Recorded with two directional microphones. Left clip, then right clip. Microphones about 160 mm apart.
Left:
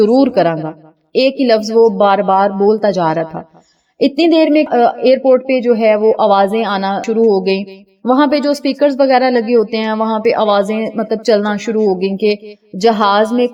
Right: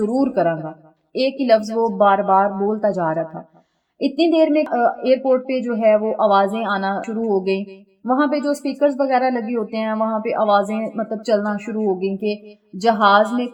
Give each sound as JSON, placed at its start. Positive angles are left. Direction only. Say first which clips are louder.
{"t": 0.0, "sound": "speech", "louder": "left 8 dB", "side_deg": 50}